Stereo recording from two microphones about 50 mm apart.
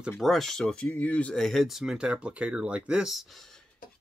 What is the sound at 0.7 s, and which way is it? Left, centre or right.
Speech, left.